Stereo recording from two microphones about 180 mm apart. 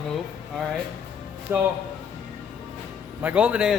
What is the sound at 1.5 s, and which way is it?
Speech, 10° right (ahead or behind).